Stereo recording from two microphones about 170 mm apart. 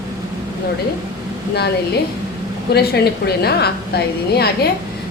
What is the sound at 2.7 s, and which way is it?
A woman's voice, 70° left (ahead or behind).